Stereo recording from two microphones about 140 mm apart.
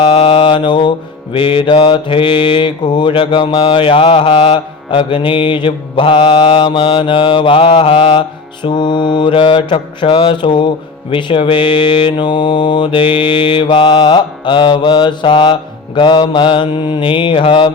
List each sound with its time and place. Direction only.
0.0 s mantra: 40° left (ahead or behind)